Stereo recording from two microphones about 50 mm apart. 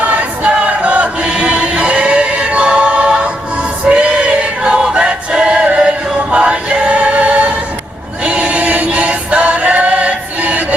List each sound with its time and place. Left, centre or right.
0.0 s choir: right
3.8 s music: right
4.6 s choir: centre